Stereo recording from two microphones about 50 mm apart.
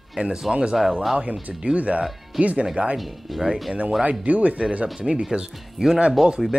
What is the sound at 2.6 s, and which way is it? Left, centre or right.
Speech, centre.